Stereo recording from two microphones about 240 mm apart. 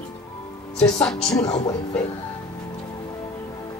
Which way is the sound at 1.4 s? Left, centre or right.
Left.